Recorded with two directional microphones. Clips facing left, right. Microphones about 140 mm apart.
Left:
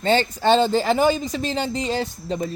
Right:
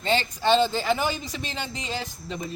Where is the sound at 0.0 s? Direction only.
45° left (ahead or behind).